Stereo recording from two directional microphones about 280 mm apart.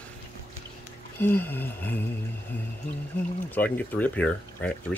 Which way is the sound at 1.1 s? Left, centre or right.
Centre.